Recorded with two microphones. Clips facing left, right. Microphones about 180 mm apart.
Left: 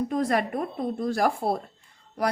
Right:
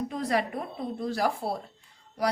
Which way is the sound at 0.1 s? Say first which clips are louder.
Left 3 dB; 50° left (ahead or behind).